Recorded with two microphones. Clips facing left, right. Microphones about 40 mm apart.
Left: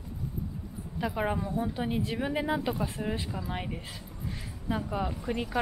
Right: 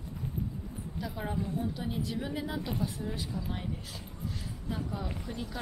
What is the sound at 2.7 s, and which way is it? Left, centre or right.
Speech, left.